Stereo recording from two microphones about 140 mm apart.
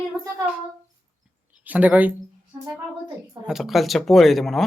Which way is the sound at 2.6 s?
25° right (ahead or behind).